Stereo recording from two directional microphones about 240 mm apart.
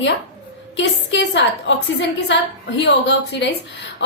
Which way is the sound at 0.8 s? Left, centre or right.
Left.